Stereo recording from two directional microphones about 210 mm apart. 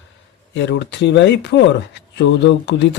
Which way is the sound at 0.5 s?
55° left (ahead or behind).